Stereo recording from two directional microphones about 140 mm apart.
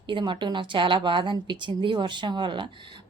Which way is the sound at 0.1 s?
35° right (ahead or behind).